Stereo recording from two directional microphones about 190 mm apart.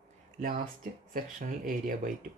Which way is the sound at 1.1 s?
45° right (ahead or behind).